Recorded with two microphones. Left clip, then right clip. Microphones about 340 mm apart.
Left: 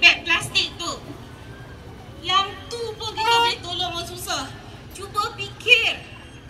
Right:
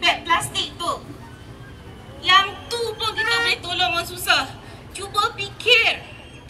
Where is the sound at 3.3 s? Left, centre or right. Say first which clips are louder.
Left 5 dB; right.